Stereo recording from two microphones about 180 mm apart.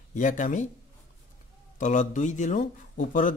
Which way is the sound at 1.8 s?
40° left (ahead or behind).